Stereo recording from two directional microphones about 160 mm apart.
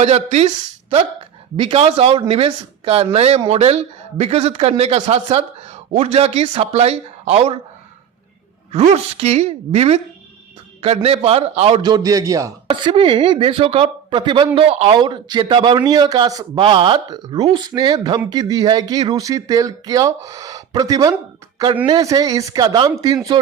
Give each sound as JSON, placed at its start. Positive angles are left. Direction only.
{"t": 0.0, "sound": "speech", "side_deg": -40}
{"t": 8.7, "sound": "speech", "side_deg": -45}
{"t": 11.8, "sound": "speech", "side_deg": -25}
{"t": 12.7, "sound": "speech", "side_deg": -30}